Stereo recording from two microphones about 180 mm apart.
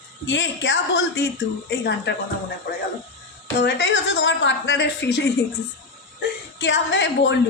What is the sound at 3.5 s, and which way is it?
A woman's voice, 70° left (ahead or behind).